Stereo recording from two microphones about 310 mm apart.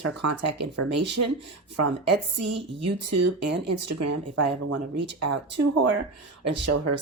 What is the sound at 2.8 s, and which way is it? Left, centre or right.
Speech, right.